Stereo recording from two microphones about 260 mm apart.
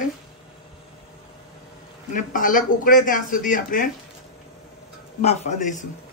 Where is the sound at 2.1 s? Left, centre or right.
Left.